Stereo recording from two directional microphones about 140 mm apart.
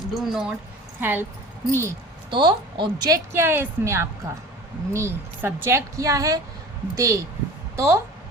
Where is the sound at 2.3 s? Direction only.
35° right (ahead or behind).